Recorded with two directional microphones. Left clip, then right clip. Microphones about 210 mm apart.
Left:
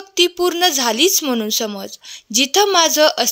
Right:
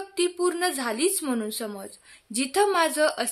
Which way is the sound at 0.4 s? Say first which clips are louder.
Left 10 dB; 40° left (ahead or behind).